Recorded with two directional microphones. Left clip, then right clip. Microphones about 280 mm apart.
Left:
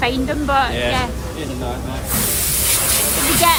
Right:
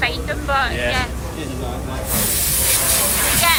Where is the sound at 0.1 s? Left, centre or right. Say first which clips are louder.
Left 3 dB; left.